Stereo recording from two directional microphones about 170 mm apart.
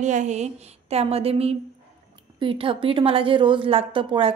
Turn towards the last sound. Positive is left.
turn(degrees=-30)  # may be behind; listen again after turning